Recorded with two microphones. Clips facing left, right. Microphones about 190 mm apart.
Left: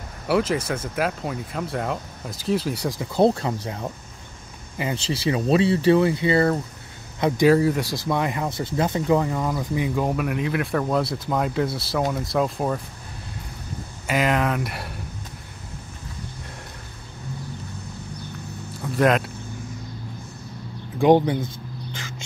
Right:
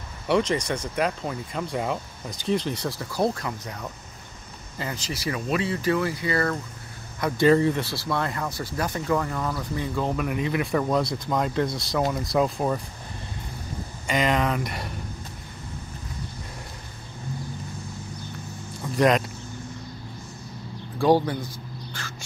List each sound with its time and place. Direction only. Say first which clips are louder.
0.3 s speech: left 1 dB; 5° left (ahead or behind)
3.2 s speech: left 7 dB; 30° left (ahead or behind)
4.9 s speech: left 7 dB; 30° left (ahead or behind)
7.4 s speech: left 1 dB; 5° left (ahead or behind)
14.0 s speech: left 1 dB; 5° left (ahead or behind)
18.8 s speech: left 1 dB; centre (ahead or behind)
21.0 s speech: left 4 dB; 20° left (ahead or behind)